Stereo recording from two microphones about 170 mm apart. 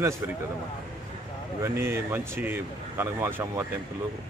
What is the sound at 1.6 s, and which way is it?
Speech, 15° right (ahead or behind).